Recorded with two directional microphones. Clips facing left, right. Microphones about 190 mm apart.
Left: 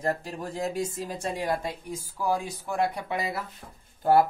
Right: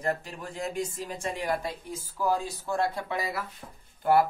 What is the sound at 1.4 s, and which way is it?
Speech, 15° left (ahead or behind).